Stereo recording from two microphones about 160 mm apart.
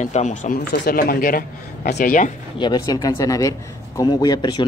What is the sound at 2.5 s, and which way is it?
A man's voice, 25° left (ahead or behind).